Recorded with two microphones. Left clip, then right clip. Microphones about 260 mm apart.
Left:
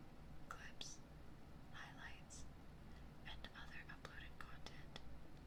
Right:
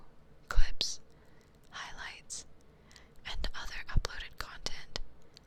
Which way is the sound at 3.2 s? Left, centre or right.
Right.